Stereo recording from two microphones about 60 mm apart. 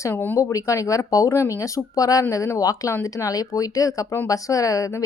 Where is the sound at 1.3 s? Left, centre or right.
Left.